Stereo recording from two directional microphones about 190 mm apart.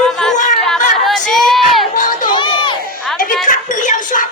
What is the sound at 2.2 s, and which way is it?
Crowd, 25° left (ahead or behind).